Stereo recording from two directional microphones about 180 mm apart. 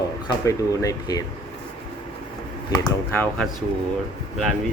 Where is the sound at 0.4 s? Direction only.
20° left (ahead or behind).